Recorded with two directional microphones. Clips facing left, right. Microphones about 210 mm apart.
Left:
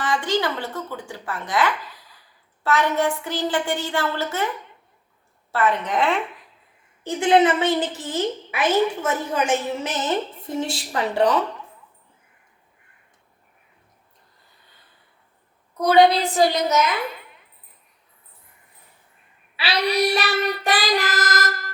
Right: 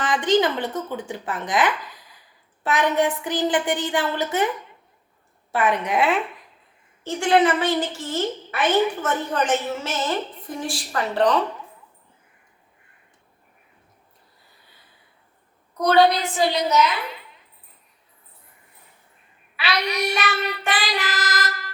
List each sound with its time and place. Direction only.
0.0 s a woman's voice: 20° right (ahead or behind)
5.5 s a woman's voice: 15° right (ahead or behind)
7.0 s a woman's voice: 20° left (ahead or behind)
16.0 s child singing: 30° left (ahead or behind); by 16.8 s 45° left (ahead or behind)
19.5 s child singing: 30° left (ahead or behind)